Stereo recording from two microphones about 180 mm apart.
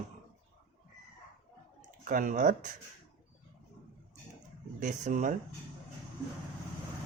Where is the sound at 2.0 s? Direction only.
45° right (ahead or behind).